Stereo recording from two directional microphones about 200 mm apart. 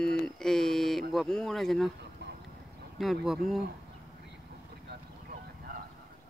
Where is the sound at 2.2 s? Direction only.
60° right (ahead or behind).